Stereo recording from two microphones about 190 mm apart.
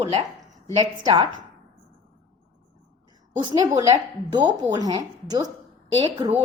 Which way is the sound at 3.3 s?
25° right (ahead or behind).